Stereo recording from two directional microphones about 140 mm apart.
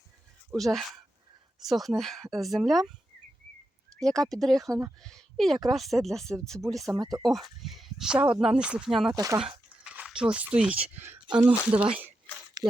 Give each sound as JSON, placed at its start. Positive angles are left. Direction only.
{"t": 0.5, "sound": "speech", "side_deg": 0}
{"t": 4.3, "sound": "speech", "side_deg": 0}
{"t": 6.9, "sound": "speech", "side_deg": -30}
{"t": 7.3, "sound": "speech", "side_deg": 0}
{"t": 9.1, "sound": "speech", "side_deg": -25}
{"t": 9.8, "sound": "speech", "side_deg": -5}
{"t": 11.3, "sound": "speech", "side_deg": -30}
{"t": 11.7, "sound": "speech", "side_deg": -10}
{"t": 12.6, "sound": "a sound", "side_deg": -30}